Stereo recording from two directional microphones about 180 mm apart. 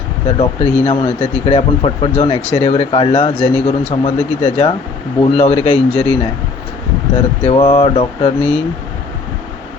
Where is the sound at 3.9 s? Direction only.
40° left (ahead or behind).